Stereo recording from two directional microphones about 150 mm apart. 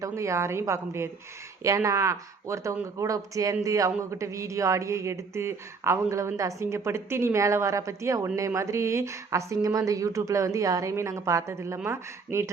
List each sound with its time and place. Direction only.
0.0 s a man's voice: 20° right (ahead or behind)